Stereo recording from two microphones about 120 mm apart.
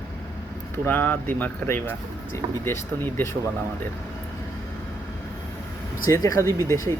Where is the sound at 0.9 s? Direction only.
15° left (ahead or behind).